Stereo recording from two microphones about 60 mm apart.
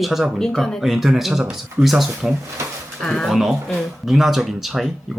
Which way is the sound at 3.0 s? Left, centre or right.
Centre.